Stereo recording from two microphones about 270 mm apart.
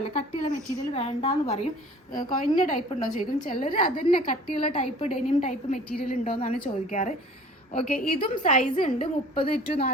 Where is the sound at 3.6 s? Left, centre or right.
Centre.